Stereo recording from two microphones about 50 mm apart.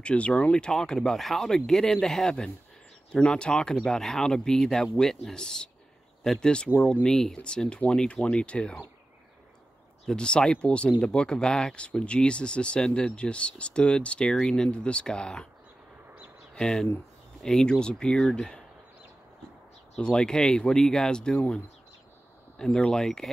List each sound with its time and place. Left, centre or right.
0.0 s speech: left
10.0 s speech: centre
16.5 s speech: centre
20.0 s speech: centre
22.6 s speech: centre